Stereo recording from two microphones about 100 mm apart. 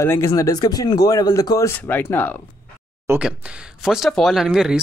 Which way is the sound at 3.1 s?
30° right (ahead or behind).